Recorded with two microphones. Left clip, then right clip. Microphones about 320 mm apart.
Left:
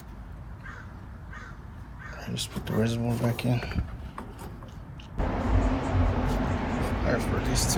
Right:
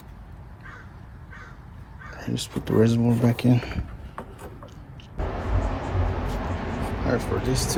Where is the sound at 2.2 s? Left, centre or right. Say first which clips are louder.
Right 4 dB; right.